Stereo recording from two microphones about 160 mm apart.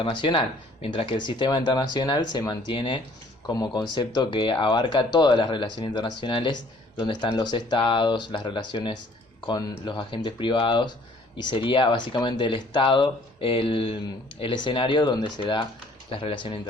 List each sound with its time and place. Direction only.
0.0 s speech: 30° left (ahead or behind)